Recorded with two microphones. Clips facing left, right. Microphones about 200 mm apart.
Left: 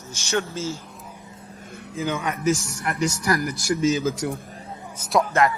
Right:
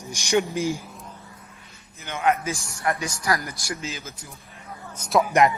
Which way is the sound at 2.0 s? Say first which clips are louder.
Left 14 dB; 90° left.